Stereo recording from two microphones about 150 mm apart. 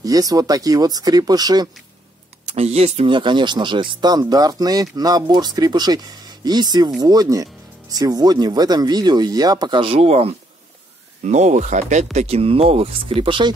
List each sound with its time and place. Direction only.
0.0 s speech: 25° right (ahead or behind)
2.5 s speech: 45° right (ahead or behind)